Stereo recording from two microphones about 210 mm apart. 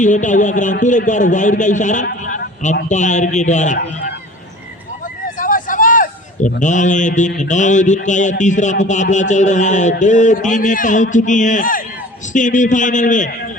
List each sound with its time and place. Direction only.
0.0 s a man's voice: 35° left (ahead or behind)
5.4 s a man's voice: 40° left (ahead or behind)